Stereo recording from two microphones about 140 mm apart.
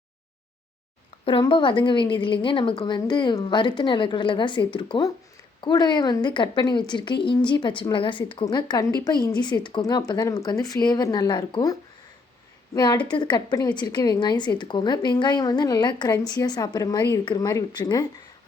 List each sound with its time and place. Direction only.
1.2 s a woman's voice: 40° left (ahead or behind)